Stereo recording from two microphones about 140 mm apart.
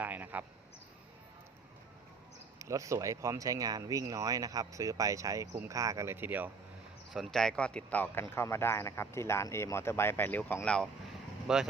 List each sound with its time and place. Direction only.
0.0 s speech: 10° right (ahead or behind)
2.6 s speech: 20° right (ahead or behind)
7.1 s speech: centre (ahead or behind)
11.4 s speech: 5° right (ahead or behind)